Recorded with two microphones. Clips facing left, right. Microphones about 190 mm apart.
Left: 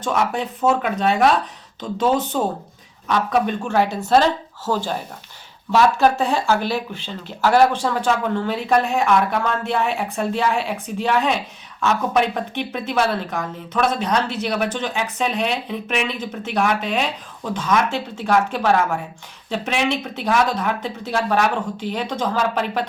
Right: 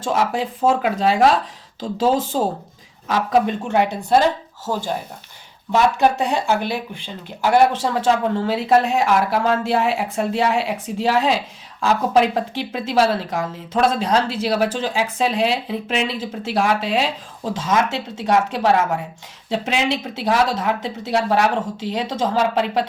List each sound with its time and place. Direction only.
0.0 s speech: 25° right (ahead or behind)